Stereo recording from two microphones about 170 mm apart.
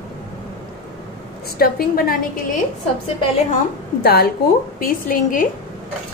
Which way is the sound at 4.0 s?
65° left (ahead or behind).